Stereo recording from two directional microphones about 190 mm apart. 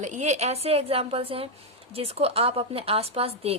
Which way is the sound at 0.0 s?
40° right (ahead or behind).